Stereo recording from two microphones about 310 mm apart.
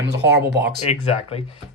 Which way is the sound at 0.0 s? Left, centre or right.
Right.